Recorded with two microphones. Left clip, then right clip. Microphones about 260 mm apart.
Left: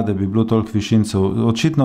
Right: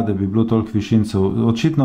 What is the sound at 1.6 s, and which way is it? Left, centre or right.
Speech, left.